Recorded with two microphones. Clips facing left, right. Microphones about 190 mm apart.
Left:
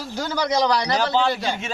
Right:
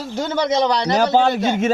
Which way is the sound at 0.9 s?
45° right (ahead or behind).